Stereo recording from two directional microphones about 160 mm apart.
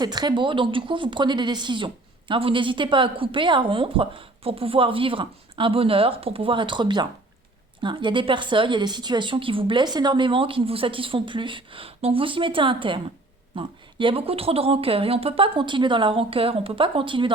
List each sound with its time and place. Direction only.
0.0 s speech: 25° right (ahead or behind)